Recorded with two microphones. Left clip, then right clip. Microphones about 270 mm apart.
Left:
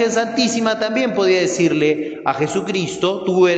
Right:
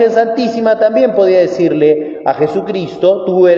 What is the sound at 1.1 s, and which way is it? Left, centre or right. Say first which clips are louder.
A man's voice: right 7 dB; left.